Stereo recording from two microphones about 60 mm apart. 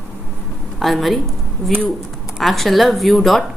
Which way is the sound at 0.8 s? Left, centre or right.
Centre.